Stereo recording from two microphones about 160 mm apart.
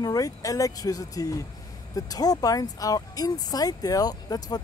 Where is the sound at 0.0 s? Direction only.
20° left (ahead or behind).